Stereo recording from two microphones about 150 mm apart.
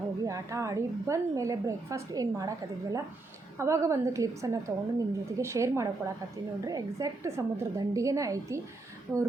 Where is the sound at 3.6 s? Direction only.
20° right (ahead or behind).